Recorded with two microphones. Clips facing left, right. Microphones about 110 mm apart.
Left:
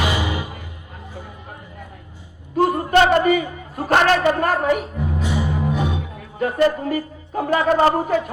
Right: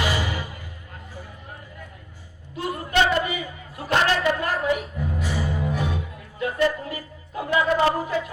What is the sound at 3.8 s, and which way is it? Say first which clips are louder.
Speech: left 5 dB; 55° left (ahead or behind).